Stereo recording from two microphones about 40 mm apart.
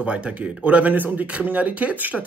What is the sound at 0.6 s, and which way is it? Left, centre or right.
A man's voice, right.